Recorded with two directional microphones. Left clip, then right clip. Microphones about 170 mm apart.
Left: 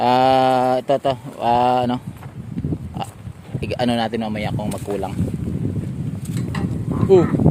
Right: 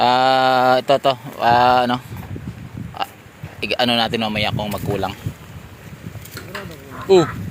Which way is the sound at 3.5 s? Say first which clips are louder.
Right 4 dB; 30° left (ahead or behind).